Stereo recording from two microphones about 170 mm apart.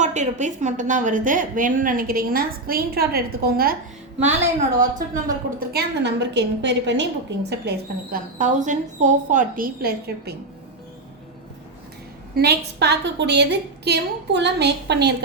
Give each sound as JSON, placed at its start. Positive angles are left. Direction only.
{"t": 0.0, "sound": "a woman's voice", "side_deg": -45}
{"t": 4.9, "sound": "a woman's voice", "side_deg": -55}
{"t": 8.1, "sound": "a woman's voice", "side_deg": -50}
{"t": 12.4, "sound": "a woman's voice", "side_deg": -75}